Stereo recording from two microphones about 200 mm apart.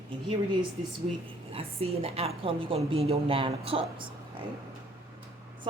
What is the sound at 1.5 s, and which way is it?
A woman's voice, 30° right (ahead or behind).